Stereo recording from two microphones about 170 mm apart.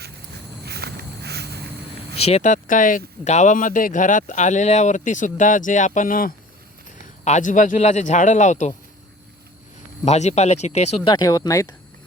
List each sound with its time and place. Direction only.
0.6 s a sound: 70° right (ahead or behind)
2.1 s speech: 35° left (ahead or behind)
10.1 s speech: 40° left (ahead or behind)
11.1 s speech: 20° left (ahead or behind)